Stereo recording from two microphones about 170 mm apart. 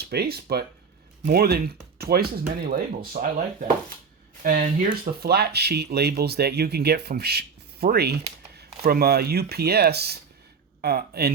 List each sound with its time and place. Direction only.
0.0 s speech: 70° right (ahead or behind)
2.6 s speech: 55° right (ahead or behind)
4.4 s speech: 50° right (ahead or behind)
5.2 s speech: 70° right (ahead or behind)